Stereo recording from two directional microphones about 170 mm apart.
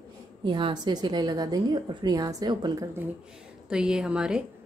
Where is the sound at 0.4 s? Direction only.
30° right (ahead or behind).